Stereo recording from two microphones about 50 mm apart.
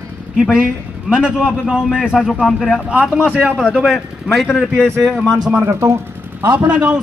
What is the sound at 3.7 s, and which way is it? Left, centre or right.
Speech, centre.